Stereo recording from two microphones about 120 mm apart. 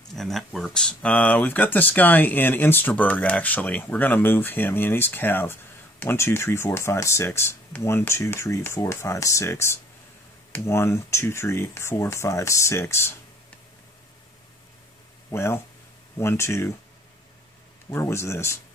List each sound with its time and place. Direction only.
0.1 s speech: centre (ahead or behind); by 13.1 s 20° left (ahead or behind)
15.3 s speech: 20° left (ahead or behind)
17.8 s speech: 20° left (ahead or behind)